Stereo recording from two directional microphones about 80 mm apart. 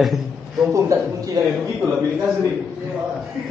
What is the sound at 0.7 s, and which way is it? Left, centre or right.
Speech, right.